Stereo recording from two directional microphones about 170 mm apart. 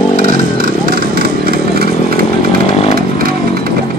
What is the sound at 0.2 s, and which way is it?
Chainsaw, 55° right (ahead or behind).